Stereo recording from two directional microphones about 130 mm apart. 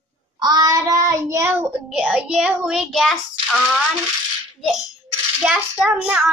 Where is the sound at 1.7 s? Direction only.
10° right (ahead or behind).